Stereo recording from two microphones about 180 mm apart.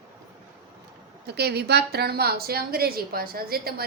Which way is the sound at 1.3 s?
65° right (ahead or behind).